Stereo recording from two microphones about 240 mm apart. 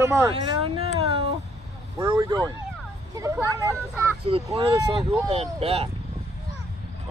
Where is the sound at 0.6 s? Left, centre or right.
Right.